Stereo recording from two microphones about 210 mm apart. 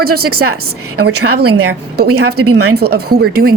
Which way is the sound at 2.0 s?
90° right.